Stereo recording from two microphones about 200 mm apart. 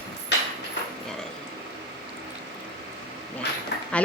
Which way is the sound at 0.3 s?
60° left (ahead or behind).